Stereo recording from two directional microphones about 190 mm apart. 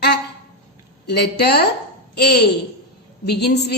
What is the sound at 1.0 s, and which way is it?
A woman's voice, 60° left (ahead or behind).